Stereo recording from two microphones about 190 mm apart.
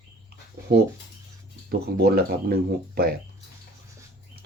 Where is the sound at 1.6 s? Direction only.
55° right (ahead or behind).